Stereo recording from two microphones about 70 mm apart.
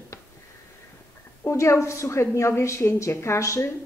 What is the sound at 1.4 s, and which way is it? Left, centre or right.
A woman's voice, left.